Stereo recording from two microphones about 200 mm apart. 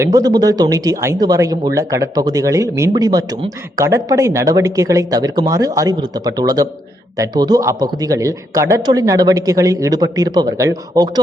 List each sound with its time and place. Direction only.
0.0 s a man's voice: 20° right (ahead or behind)